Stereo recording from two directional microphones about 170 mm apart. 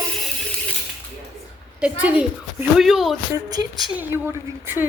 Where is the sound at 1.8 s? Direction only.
10° right (ahead or behind).